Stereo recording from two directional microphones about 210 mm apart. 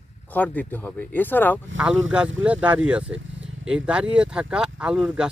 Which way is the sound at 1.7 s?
65° right (ahead or behind).